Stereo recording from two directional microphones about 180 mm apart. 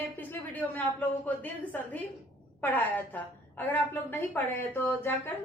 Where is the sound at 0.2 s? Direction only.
10° left (ahead or behind).